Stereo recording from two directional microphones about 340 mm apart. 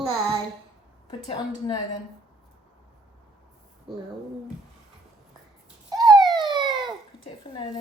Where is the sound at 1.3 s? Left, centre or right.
Centre.